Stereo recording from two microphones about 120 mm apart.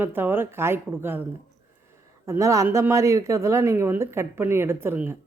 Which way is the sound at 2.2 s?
25° right (ahead or behind).